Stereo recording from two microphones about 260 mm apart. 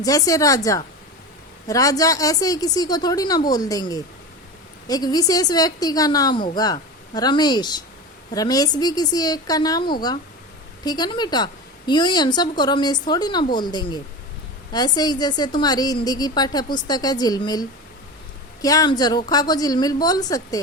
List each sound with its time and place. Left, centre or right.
0.0 s a woman's voice: centre